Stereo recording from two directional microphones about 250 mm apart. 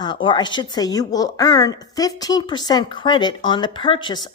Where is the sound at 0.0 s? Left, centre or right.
Centre.